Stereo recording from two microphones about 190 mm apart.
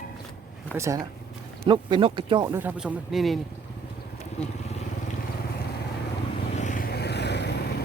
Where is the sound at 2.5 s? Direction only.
10° right (ahead or behind).